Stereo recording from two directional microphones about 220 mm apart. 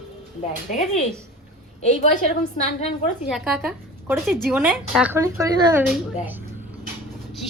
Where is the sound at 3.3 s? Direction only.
5° right (ahead or behind).